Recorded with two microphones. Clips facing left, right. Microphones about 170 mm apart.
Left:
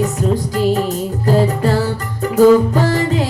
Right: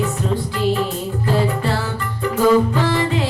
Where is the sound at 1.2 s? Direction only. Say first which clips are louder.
Left 5 dB; 40° left (ahead or behind).